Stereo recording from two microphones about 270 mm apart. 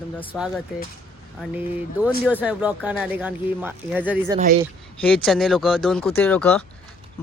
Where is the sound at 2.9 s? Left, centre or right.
Centre.